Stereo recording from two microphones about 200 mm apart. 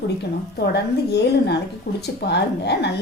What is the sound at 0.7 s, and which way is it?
A woman's voice, 55° left (ahead or behind).